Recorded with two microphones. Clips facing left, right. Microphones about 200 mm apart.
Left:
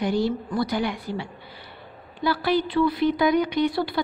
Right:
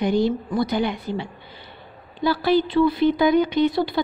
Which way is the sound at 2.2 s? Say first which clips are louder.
Right 4 dB; 25° right (ahead or behind).